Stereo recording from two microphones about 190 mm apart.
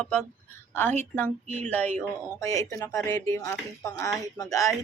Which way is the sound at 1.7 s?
10° left (ahead or behind).